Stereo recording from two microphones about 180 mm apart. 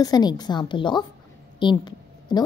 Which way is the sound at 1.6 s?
25° left (ahead or behind).